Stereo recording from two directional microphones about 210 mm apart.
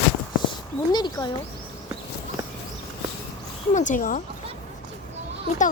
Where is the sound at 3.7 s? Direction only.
40° left (ahead or behind).